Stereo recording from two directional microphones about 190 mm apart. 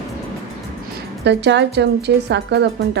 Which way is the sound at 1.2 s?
65° right (ahead or behind).